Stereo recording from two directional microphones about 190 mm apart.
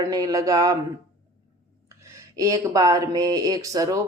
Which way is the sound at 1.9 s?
15° right (ahead or behind).